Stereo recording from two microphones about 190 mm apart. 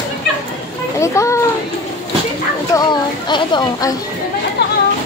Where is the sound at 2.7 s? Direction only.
20° left (ahead or behind).